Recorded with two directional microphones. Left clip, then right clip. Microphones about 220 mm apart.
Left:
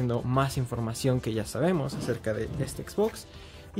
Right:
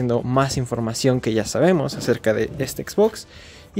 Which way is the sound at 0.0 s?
25° right (ahead or behind).